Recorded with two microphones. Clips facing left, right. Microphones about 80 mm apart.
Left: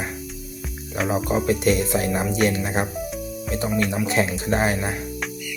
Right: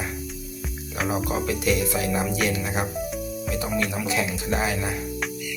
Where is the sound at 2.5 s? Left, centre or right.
Left.